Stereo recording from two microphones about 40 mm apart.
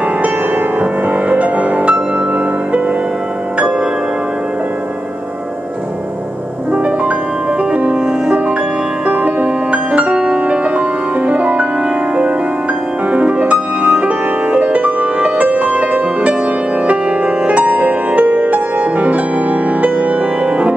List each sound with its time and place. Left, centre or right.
0.2 s music: right
6.7 s music: right
9.0 s music: right
13.1 s music: right